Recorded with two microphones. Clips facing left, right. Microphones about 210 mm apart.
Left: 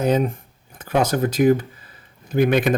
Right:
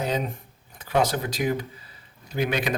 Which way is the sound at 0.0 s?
50° left (ahead or behind).